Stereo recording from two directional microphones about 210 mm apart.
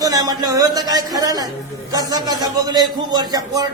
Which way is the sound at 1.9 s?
20° right (ahead or behind).